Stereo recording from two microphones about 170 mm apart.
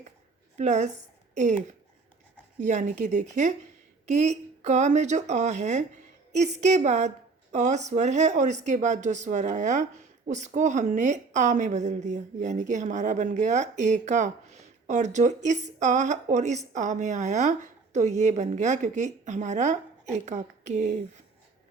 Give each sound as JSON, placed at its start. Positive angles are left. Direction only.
{"t": 0.5, "sound": "a woman's voice", "side_deg": -45}